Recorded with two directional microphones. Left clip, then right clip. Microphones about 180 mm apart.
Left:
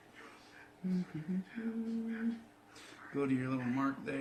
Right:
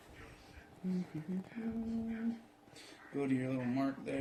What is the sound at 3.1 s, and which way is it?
Speech, 15° left (ahead or behind).